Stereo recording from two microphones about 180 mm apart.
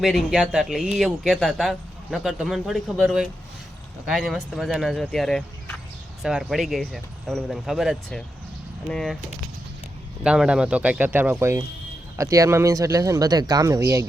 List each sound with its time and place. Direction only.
0.0 s speech: centre (ahead or behind)
10.2 s speech: 5° right (ahead or behind)